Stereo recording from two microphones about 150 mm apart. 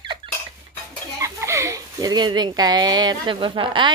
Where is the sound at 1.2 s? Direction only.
20° right (ahead or behind).